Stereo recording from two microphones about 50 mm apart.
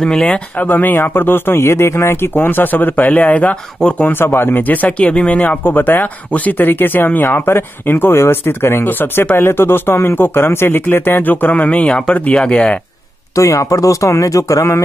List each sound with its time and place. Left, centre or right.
0.0 s speech: centre
0.6 s speech: left
2.4 s speech: left
4.0 s speech: left
4.8 s speech: left
8.8 s speech: left
13.4 s speech: left